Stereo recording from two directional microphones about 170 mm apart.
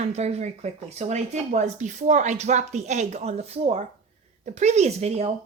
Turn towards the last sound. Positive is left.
turn(degrees=-40)  # may be behind; listen again after turning